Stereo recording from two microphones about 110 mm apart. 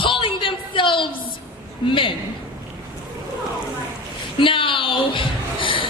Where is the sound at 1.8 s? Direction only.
50° left (ahead or behind).